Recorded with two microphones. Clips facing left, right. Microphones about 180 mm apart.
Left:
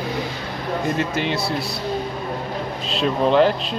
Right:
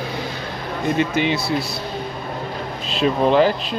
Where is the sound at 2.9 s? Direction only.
5° right (ahead or behind).